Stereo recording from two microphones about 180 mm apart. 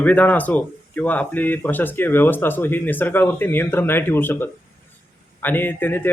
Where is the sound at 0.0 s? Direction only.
10° left (ahead or behind).